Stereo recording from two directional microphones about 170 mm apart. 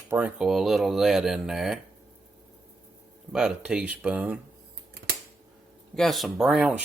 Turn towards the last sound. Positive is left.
turn(degrees=-5)  # may be behind; listen again after turning